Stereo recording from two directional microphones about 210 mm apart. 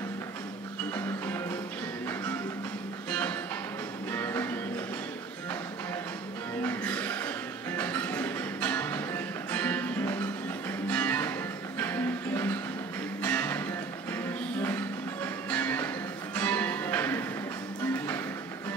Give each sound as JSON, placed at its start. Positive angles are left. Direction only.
{"t": 0.9, "sound": "music", "side_deg": 10}
{"t": 3.1, "sound": "music", "side_deg": 5}
{"t": 6.6, "sound": "music", "side_deg": 10}